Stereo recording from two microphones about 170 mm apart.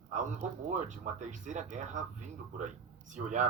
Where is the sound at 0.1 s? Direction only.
45° right (ahead or behind).